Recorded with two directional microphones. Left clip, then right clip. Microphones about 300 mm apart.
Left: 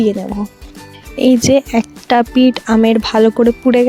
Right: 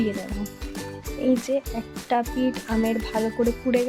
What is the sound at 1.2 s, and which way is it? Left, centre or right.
Speech, left.